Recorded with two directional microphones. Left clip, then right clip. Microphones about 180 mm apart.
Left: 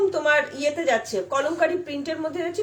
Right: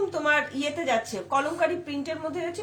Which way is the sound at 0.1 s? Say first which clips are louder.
Left 3 dB; 20° left (ahead or behind).